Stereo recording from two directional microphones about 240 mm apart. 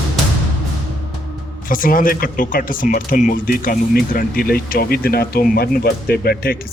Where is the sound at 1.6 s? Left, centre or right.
Left.